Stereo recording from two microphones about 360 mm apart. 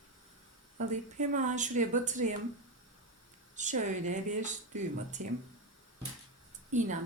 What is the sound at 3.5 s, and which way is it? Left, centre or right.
Speech, centre.